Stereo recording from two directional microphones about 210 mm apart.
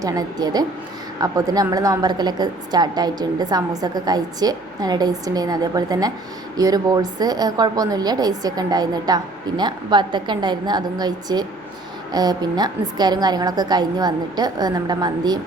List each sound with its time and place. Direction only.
0.0 s a woman's voice: 15° right (ahead or behind)